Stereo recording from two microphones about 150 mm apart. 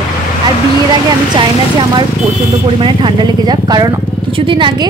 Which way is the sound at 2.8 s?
35° right (ahead or behind).